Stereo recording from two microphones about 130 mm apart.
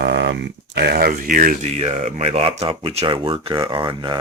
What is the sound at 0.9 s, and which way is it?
Speech, 90° right.